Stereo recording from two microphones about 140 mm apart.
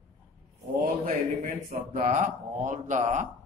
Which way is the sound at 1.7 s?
75° right (ahead or behind).